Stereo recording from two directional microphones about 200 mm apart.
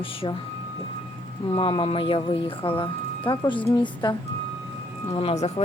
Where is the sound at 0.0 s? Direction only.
25° left (ahead or behind).